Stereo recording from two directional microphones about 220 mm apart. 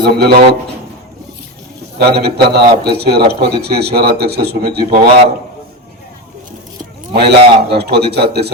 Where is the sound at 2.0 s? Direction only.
45° right (ahead or behind).